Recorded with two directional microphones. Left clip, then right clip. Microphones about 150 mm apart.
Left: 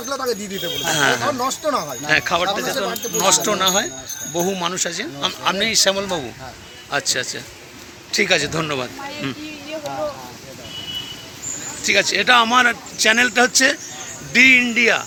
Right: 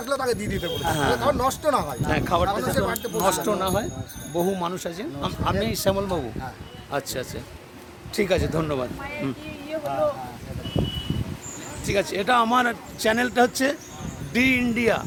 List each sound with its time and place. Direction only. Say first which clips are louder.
0.2 s speech: left 2 dB; 10° right (ahead or behind)
3.2 s speech: left 6 dB; 10° right (ahead or behind)
11.8 s speech: left 8 dB; 15° right (ahead or behind)